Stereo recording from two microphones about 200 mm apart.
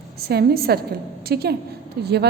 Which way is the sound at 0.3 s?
50° right (ahead or behind).